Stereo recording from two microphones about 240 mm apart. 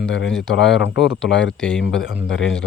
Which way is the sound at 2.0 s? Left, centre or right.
Left.